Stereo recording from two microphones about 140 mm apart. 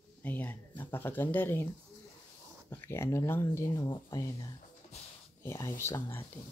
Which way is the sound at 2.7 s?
15° left (ahead or behind).